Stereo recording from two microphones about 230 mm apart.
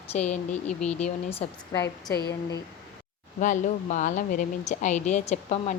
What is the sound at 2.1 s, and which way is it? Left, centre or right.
Speech, left.